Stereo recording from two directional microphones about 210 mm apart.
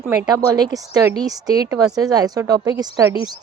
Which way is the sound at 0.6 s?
15° right (ahead or behind).